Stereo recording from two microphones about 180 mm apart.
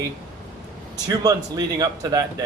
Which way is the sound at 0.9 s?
20° right (ahead or behind).